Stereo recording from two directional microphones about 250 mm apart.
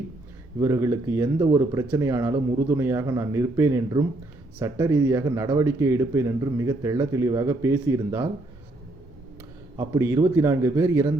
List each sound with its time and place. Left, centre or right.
0.6 s a man's voice: centre
9.7 s a man's voice: centre